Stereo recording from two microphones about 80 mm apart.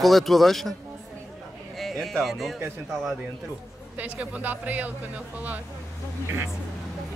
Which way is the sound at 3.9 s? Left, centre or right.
Centre.